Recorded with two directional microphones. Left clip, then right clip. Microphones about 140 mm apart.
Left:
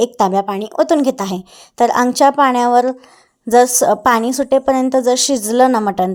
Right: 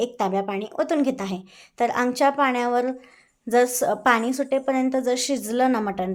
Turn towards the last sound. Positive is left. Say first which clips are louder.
# left 10 dB
turn(degrees=45)  # may be behind; listen again after turning